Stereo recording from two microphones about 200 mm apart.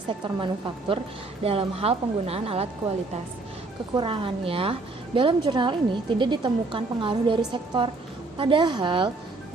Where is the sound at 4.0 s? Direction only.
25° right (ahead or behind).